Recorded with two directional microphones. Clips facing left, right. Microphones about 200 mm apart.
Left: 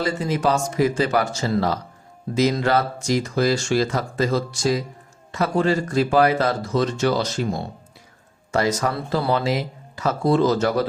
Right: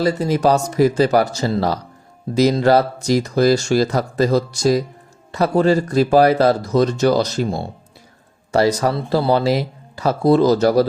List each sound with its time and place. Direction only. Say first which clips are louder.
0.0 s speech: right 5 dB; 40° right (ahead or behind)